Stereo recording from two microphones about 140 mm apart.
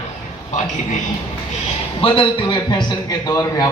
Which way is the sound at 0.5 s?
60° left (ahead or behind).